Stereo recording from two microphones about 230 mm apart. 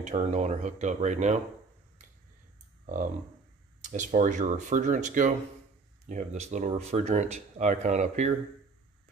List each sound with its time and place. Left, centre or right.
0.0 s speech: right
3.8 s speech: right